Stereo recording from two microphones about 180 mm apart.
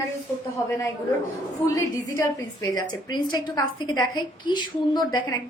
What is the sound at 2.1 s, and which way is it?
A woman's voice, 20° left (ahead or behind).